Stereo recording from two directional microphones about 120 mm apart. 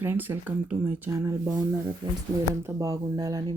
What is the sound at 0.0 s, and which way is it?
Speech, 15° right (ahead or behind).